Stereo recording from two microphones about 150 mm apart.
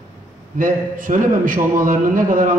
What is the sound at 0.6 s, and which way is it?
A man's voice, 65° right (ahead or behind).